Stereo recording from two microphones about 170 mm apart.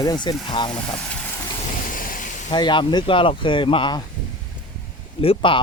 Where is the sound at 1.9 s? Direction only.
55° left (ahead or behind).